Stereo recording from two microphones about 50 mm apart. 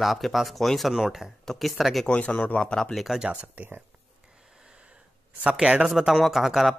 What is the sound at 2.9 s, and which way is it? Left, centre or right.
Speech, centre.